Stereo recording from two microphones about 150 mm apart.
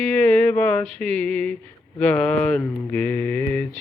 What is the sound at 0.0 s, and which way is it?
Mantra, 10° left (ahead or behind).